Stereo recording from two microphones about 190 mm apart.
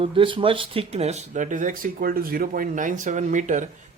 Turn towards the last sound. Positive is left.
turn(degrees=-40)  # may be behind; listen again after turning